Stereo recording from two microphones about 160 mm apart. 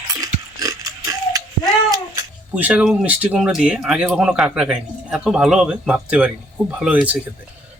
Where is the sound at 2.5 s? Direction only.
10° right (ahead or behind).